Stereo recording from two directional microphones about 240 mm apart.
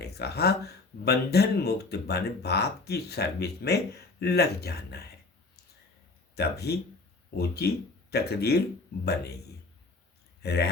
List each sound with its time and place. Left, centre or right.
0.0 s speech: left
6.3 s speech: left
10.4 s speech: left